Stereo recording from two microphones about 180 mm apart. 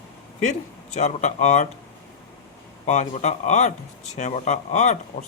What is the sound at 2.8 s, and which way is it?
Speech, 40° left (ahead or behind).